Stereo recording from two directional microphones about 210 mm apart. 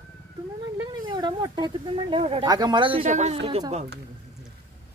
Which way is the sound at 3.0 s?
35° right (ahead or behind).